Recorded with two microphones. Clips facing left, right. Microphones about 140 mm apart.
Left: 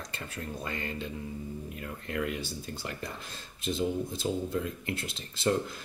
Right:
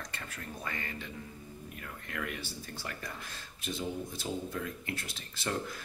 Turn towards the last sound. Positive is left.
turn(degrees=25)  # may be behind; listen again after turning